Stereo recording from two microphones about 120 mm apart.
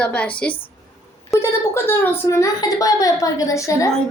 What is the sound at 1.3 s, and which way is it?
A woman's voice, 20° left (ahead or behind).